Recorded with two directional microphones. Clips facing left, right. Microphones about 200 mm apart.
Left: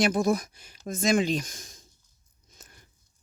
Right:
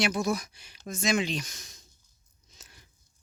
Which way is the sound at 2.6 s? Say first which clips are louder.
Left 2 dB; 45° left (ahead or behind).